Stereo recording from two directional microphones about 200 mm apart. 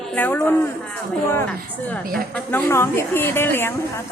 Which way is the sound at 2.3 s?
10° left (ahead or behind).